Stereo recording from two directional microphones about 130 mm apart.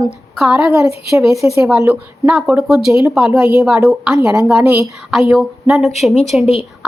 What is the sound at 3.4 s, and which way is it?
A woman's voice, 15° right (ahead or behind).